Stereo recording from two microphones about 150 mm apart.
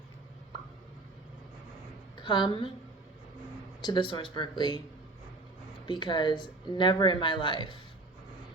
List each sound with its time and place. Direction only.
2.1 s a woman's voice: 30° left (ahead or behind)
3.8 s speech: 30° left (ahead or behind)
5.8 s speech: 30° left (ahead or behind)